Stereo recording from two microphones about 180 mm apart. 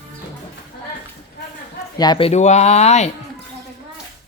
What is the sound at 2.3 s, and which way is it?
Speech, 40° left (ahead or behind).